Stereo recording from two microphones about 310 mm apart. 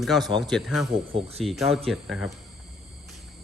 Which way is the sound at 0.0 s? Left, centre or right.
Centre.